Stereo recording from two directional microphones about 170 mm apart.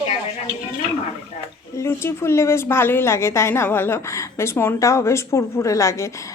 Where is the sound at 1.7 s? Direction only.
15° left (ahead or behind).